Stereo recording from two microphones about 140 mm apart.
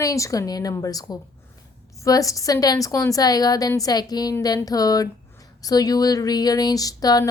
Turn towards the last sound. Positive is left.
turn(degrees=25)  # may be behind; listen again after turning